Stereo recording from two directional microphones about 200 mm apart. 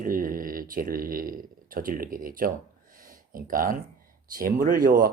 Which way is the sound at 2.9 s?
45° right (ahead or behind).